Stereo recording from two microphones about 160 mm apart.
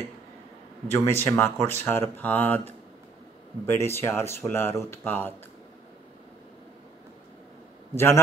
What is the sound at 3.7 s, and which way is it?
Speech, 15° left (ahead or behind).